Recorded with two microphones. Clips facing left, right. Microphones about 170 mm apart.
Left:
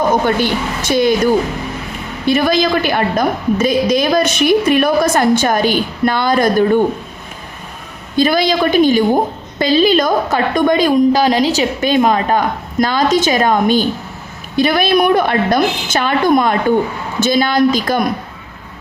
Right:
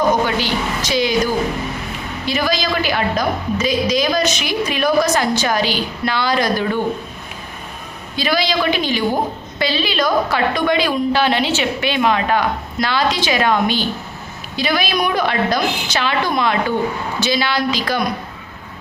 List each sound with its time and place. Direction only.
0.3 s a woman's voice: 50° left (ahead or behind)
8.1 s a woman's voice: 50° left (ahead or behind)